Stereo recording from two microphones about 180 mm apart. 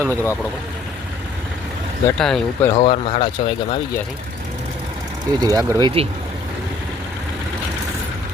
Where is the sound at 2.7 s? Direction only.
30° left (ahead or behind).